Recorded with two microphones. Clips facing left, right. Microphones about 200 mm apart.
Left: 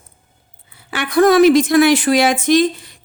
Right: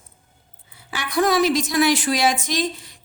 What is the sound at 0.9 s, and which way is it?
A woman's voice, 55° left (ahead or behind).